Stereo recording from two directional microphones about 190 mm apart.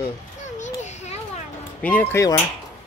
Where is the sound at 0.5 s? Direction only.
40° left (ahead or behind).